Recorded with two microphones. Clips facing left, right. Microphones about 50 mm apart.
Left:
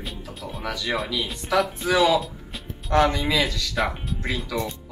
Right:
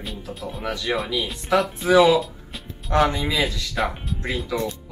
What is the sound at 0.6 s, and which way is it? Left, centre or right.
Speech, centre.